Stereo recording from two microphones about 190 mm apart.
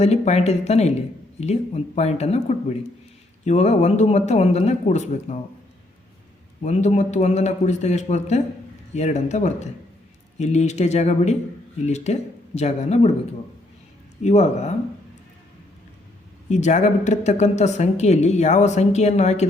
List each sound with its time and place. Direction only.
0.0 s speech: 35° left (ahead or behind)
6.6 s speech: 35° left (ahead or behind)
14.2 s speech: 35° left (ahead or behind)
16.5 s speech: 40° left (ahead or behind)